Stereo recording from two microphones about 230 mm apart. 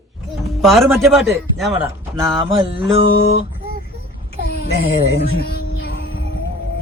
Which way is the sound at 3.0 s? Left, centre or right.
Left.